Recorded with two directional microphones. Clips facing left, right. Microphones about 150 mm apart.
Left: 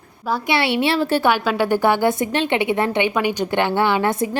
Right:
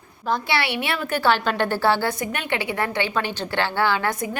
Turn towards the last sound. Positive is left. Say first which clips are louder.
# left 4 dB
turn(degrees=25)  # may be behind; listen again after turning